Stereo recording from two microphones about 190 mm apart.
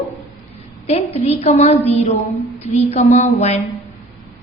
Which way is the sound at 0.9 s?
30° left (ahead or behind).